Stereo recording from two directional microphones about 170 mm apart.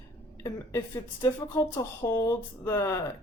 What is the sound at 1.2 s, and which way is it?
Speech, 20° left (ahead or behind).